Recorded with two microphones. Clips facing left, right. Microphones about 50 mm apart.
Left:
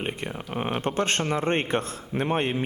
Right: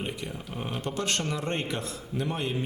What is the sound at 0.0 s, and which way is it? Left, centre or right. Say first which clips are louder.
A man's voice: left 4 dB; left.